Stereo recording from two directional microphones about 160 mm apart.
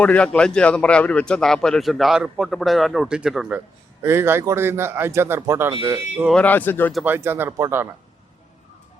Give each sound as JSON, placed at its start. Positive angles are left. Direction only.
{"t": 0.0, "sound": "a man's voice", "side_deg": 10}
{"t": 4.0, "sound": "speech", "side_deg": -15}
{"t": 6.3, "sound": "speech", "side_deg": 10}
{"t": 7.0, "sound": "speech", "side_deg": -15}